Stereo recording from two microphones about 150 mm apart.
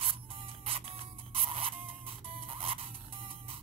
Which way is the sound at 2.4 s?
40° right (ahead or behind).